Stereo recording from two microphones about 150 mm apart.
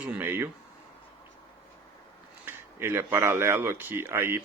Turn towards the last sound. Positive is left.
turn(degrees=-15)  # may be behind; listen again after turning